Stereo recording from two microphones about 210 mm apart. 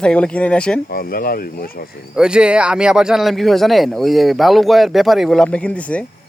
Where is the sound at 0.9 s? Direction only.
45° left (ahead or behind).